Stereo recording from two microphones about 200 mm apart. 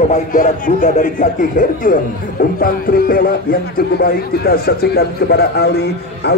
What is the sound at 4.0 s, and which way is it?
A man's voice, 50° left (ahead or behind).